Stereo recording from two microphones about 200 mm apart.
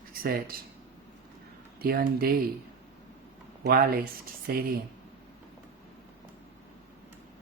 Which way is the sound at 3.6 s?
50° right (ahead or behind).